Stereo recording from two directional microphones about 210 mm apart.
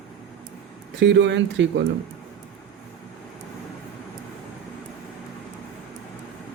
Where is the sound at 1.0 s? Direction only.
55° right (ahead or behind).